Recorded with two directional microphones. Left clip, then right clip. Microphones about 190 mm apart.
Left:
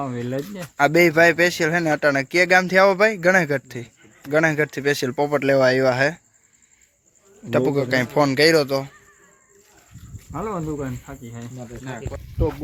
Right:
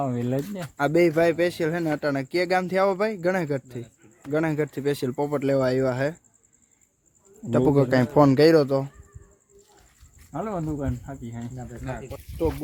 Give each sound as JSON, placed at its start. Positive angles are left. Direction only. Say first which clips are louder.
{"t": 0.0, "sound": "speech", "louder": "even", "side_deg": -65}
{"t": 0.6, "sound": "speech", "louder": "left 5 dB", "side_deg": -5}
{"t": 7.6, "sound": "a man's voice", "louder": "right 1 dB", "side_deg": -40}
{"t": 10.3, "sound": "speech", "louder": "left 3 dB", "side_deg": -50}